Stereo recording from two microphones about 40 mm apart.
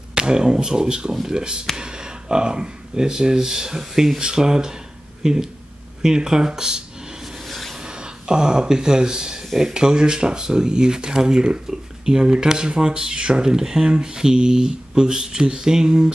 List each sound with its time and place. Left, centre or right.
0.1 s speech: centre
7.4 s rub: centre
7.8 s speech: right
9.5 s speech: centre
9.8 s speech: centre